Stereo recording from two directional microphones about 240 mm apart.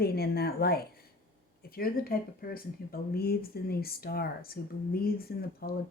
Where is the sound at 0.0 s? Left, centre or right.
Left.